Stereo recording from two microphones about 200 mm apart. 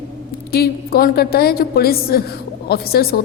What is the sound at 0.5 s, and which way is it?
A woman's voice, 50° left (ahead or behind).